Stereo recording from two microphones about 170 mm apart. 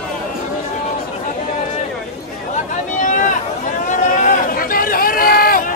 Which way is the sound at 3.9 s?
50° left (ahead or behind).